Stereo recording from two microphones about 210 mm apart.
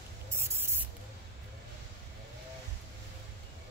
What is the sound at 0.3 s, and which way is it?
Spray, 10° right (ahead or behind).